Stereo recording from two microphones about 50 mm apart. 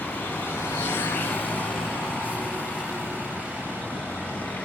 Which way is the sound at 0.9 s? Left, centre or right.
Left.